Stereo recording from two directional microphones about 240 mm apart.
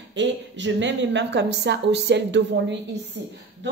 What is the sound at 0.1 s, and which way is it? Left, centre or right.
A woman's voice, right.